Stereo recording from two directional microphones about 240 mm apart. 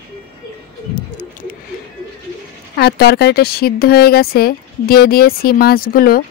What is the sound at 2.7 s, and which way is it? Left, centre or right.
Speech, left.